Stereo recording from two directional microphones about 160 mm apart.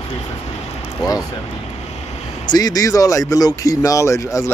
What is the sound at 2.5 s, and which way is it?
Speech, 25° left (ahead or behind).